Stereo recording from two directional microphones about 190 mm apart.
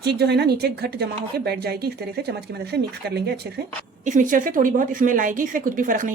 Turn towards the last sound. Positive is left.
turn(degrees=-45)  # may be behind; listen again after turning